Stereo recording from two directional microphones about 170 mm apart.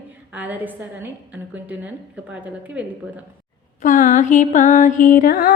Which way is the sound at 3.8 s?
50° left (ahead or behind).